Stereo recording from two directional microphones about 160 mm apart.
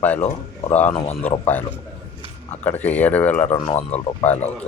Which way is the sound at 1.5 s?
10° left (ahead or behind).